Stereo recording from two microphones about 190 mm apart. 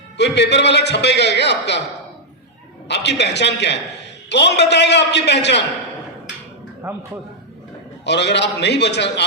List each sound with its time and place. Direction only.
0.2 s a man's voice: 65° left (ahead or behind)
2.8 s a man's voice: 65° left (ahead or behind)
6.8 s speech: 15° right (ahead or behind)
8.0 s a man's voice: 65° left (ahead or behind)